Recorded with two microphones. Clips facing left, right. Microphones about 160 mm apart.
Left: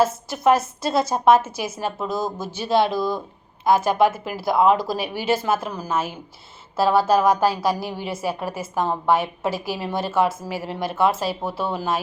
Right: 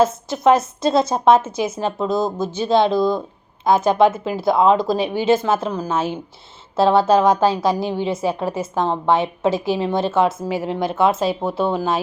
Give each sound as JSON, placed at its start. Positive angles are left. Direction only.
{"t": 0.0, "sound": "a woman's voice", "side_deg": -20}